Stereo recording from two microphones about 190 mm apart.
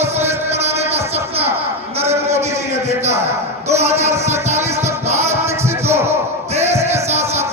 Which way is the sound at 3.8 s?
35° right (ahead or behind).